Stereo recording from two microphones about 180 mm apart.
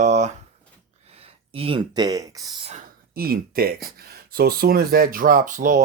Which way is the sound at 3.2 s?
55° right (ahead or behind).